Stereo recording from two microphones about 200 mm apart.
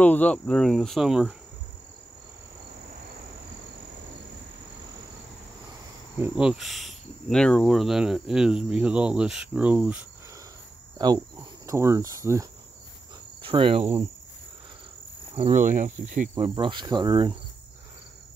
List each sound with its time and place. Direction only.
0.0 s speech: 10° left (ahead or behind)
6.1 s speech: 5° right (ahead or behind)
11.0 s cricket: 20° right (ahead or behind)
13.4 s cricket: 25° right (ahead or behind)
15.3 s cricket: 35° right (ahead or behind)
16.3 s cricket: 25° right (ahead or behind)